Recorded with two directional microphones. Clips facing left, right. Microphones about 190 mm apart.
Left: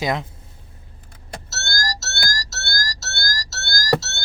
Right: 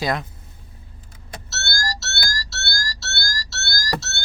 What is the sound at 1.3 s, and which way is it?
Vehicle, 45° left (ahead or behind).